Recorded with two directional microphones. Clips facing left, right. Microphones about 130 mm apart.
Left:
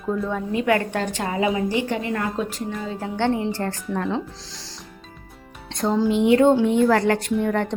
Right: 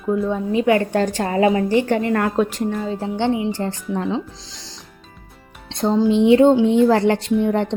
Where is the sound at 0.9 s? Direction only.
40° right (ahead or behind); by 2.8 s 65° right (ahead or behind).